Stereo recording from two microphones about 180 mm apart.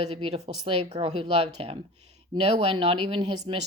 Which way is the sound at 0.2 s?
30° right (ahead or behind).